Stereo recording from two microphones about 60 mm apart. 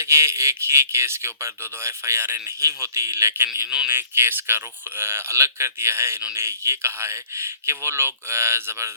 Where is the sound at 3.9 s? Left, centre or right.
Right.